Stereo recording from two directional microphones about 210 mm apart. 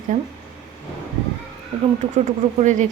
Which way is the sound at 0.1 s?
35° right (ahead or behind).